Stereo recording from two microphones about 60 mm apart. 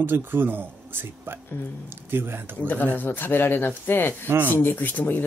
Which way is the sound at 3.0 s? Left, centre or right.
Left.